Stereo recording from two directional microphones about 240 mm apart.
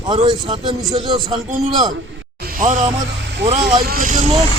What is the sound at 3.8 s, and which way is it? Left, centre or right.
Speech, right.